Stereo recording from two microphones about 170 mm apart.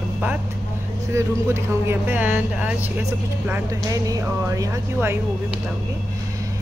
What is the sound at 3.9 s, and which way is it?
Speech, 20° right (ahead or behind).